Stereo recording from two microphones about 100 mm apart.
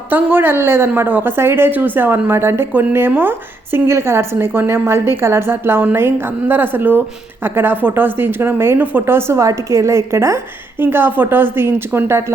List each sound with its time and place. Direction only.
0.1 s a woman's voice: 20° right (ahead or behind)